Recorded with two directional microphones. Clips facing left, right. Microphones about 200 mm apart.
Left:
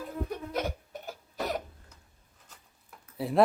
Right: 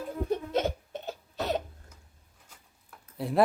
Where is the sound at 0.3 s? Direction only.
25° right (ahead or behind).